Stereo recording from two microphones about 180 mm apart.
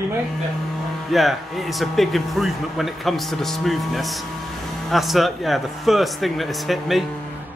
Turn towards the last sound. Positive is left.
turn(degrees=0)  # may be behind; listen again after turning